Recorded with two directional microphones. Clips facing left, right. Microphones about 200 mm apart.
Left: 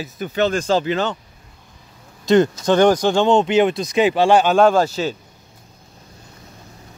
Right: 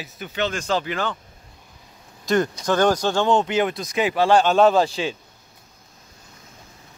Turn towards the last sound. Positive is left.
turn(degrees=5)  # may be behind; listen again after turning